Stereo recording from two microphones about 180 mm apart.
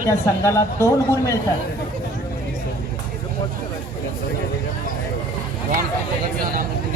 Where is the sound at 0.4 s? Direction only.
15° left (ahead or behind).